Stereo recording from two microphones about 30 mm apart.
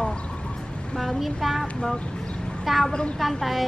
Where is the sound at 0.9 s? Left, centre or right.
Centre.